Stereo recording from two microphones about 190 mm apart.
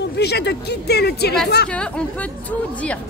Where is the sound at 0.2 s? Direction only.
60° left (ahead or behind).